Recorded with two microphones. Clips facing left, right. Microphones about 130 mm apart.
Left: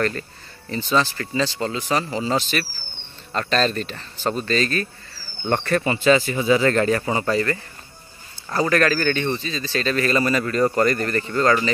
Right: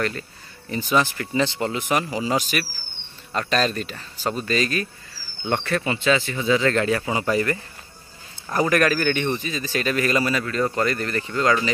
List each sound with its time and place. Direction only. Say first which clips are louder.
0.7 s speech: even; 15° right (ahead or behind)
8.5 s speech: even; 15° right (ahead or behind)